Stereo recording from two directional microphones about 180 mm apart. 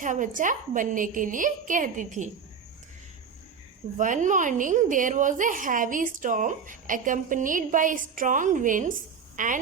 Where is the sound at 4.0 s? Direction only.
45° right (ahead or behind).